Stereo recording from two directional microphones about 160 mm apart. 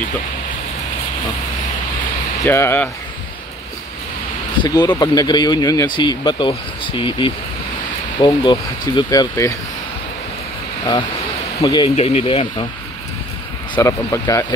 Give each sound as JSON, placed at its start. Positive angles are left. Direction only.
{"t": 2.4, "sound": "speech", "side_deg": 15}
{"t": 4.6, "sound": "speech", "side_deg": 25}
{"t": 11.6, "sound": "speech", "side_deg": 25}
{"t": 11.9, "sound": "speech", "side_deg": 40}
{"t": 13.7, "sound": "speech", "side_deg": 20}